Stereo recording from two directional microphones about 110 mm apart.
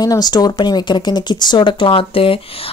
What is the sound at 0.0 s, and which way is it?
A woman's voice, 35° left (ahead or behind).